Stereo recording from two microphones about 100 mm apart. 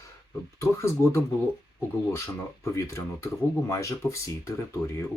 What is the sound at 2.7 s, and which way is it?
Speech, 30° left (ahead or behind).